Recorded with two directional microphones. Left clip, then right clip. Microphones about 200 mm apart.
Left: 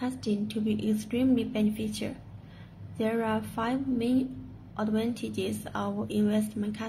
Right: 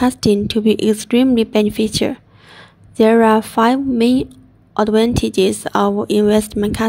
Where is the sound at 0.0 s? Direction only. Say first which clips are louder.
Right 18 dB; 45° right (ahead or behind).